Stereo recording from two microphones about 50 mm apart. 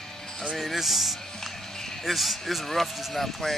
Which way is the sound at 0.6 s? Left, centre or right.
Centre.